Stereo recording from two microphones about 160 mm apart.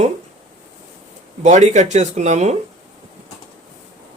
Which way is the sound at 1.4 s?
45° right (ahead or behind).